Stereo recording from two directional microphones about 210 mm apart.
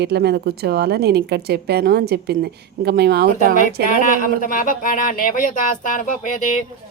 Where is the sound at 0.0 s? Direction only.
50° right (ahead or behind).